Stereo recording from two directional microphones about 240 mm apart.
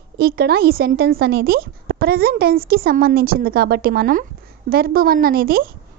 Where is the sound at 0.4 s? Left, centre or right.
Right.